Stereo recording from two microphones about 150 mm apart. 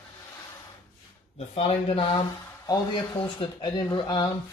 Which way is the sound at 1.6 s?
40° left (ahead or behind).